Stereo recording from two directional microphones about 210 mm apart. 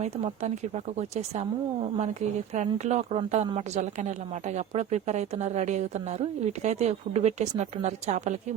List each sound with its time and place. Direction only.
0.9 s a woman's voice: 30° right (ahead or behind)
2.6 s a woman's voice: 35° right (ahead or behind)